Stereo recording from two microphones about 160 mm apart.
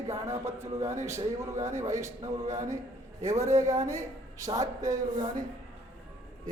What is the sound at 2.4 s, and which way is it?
Speech, 45° right (ahead or behind).